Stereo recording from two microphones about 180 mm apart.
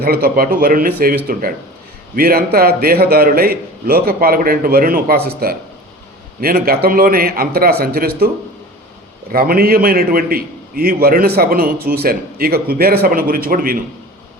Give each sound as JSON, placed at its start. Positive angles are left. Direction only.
{"t": 0.0, "sound": "a man's voice", "side_deg": -55}
{"t": 9.3, "sound": "a man's voice", "side_deg": -55}